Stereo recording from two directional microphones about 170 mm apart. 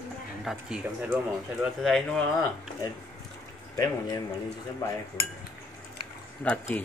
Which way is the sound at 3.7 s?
20° left (ahead or behind).